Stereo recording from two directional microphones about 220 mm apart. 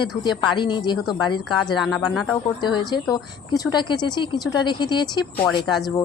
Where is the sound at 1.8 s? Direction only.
Centre (ahead or behind).